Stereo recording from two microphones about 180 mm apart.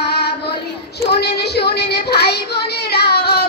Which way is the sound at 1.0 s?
65° left (ahead or behind).